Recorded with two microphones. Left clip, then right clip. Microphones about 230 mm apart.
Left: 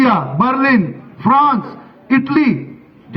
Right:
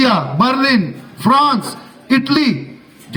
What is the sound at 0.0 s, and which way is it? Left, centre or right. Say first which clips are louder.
A man's voice: even; right.